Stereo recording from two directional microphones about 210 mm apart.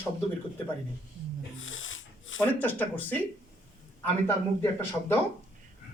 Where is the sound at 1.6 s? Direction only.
70° left (ahead or behind).